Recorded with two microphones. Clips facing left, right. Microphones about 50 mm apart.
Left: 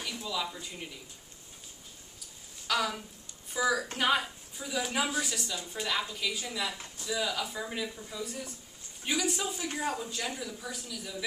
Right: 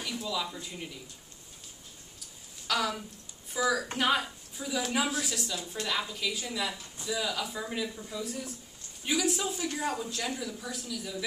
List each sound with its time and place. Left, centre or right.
0.0 s speech: centre
2.1 s a sound: centre
3.5 s a woman's voice: centre